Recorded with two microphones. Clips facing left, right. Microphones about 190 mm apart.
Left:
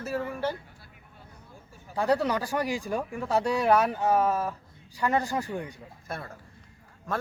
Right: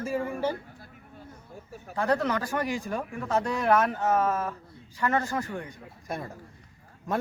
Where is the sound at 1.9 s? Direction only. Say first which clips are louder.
Left 1 dB; 15° left (ahead or behind).